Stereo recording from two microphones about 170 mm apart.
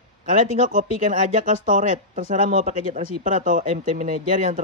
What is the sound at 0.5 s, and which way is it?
Speech, 50° right (ahead or behind).